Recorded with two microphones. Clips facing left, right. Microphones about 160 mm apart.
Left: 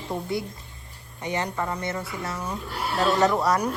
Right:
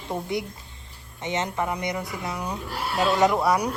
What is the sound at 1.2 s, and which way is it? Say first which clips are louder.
A woman's voice: right 1 dB; 20° right (ahead or behind).